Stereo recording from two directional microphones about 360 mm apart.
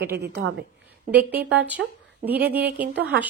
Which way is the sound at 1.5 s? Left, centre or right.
Centre.